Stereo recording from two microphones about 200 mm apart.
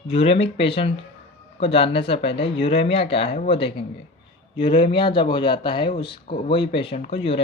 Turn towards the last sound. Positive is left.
turn(degrees=30)  # may be behind; listen again after turning